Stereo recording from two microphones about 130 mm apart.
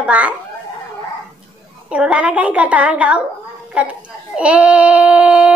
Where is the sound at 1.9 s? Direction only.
10° right (ahead or behind).